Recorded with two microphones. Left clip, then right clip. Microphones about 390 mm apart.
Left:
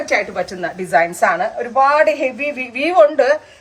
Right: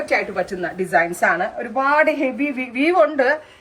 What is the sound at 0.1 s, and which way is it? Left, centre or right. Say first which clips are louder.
A woman's voice: left 2 dB; centre.